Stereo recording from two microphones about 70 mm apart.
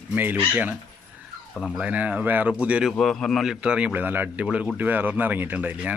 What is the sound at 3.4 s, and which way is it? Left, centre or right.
Speech, centre.